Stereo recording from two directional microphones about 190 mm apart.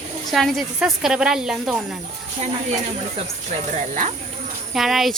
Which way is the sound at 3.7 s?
40° right (ahead or behind).